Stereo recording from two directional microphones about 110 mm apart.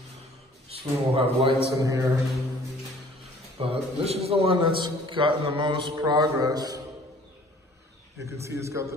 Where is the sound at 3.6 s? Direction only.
65° right (ahead or behind).